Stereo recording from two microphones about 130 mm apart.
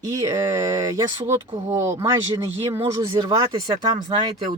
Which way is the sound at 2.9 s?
35° right (ahead or behind).